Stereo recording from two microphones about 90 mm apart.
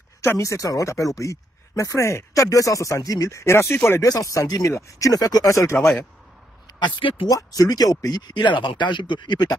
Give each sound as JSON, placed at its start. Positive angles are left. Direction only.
{"t": 0.2, "sound": "speech", "side_deg": 35}
{"t": 4.0, "sound": "speech", "side_deg": 35}
{"t": 6.8, "sound": "speech", "side_deg": 75}
{"t": 7.2, "sound": "speech", "side_deg": 40}